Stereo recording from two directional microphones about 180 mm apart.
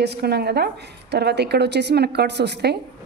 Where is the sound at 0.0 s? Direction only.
65° right (ahead or behind).